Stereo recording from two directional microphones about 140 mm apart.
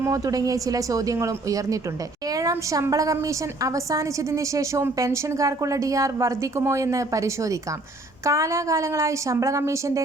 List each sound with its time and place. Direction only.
0.0 s a woman's voice: 25° right (ahead or behind)